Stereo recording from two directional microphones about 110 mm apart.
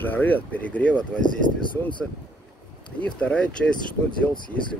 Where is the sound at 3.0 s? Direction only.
10° left (ahead or behind).